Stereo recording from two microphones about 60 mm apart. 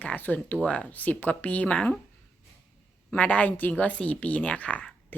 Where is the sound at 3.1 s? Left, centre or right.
Left.